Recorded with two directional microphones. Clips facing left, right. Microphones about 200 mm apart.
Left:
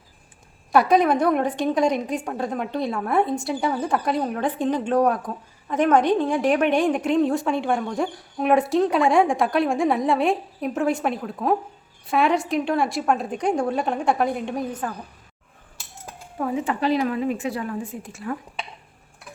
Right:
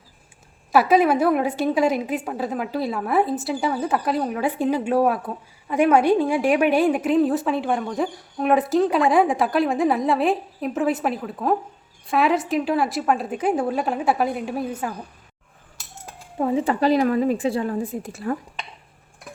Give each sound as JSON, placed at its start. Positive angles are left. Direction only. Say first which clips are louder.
{"t": 0.7, "sound": "a woman's voice", "louder": "right 1 dB", "side_deg": -5}
{"t": 16.4, "sound": "a woman's voice", "louder": "right 4 dB", "side_deg": -35}